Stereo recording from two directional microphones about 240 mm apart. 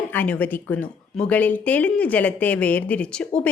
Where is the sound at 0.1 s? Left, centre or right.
Centre.